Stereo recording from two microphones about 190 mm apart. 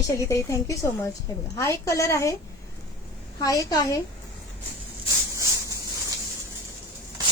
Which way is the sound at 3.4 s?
15° left (ahead or behind).